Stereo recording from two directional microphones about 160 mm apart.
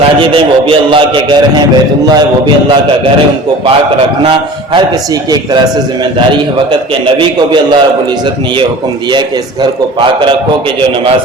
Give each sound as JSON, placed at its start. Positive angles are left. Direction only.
{"t": 0.2, "sound": "a man's voice", "side_deg": -35}
{"t": 7.2, "sound": "a man's voice", "side_deg": -30}
{"t": 10.0, "sound": "a man's voice", "side_deg": -30}